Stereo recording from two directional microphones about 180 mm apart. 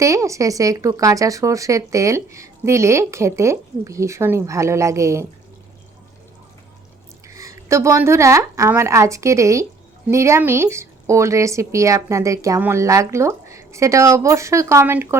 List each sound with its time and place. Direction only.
0.0 s speech: 15° right (ahead or behind)
7.3 s speech: 15° right (ahead or behind)